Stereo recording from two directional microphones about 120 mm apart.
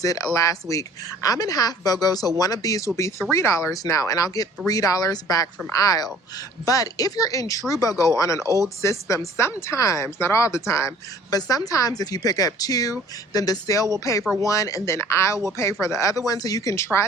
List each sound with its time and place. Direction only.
0.0 s speech: 30° left (ahead or behind)